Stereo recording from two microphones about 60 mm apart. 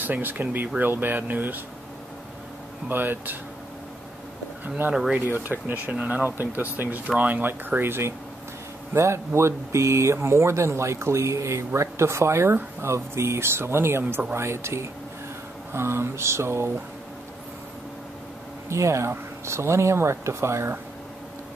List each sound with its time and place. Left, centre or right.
0.0 s speech: right
2.9 s speech: right
4.6 s speech: right
7.8 s speech: right
18.7 s speech: right